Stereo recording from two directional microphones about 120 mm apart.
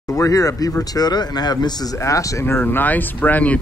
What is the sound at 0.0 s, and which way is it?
Speech, 30° left (ahead or behind).